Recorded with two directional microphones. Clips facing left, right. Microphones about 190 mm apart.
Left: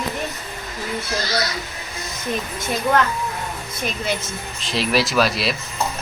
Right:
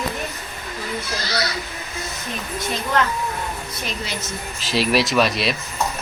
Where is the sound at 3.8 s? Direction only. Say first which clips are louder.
Left 6 dB; 50° left (ahead or behind).